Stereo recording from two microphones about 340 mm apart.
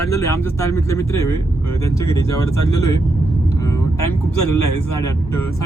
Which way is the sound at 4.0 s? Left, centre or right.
Left.